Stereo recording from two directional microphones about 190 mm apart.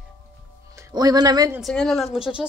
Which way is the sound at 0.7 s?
20° right (ahead or behind).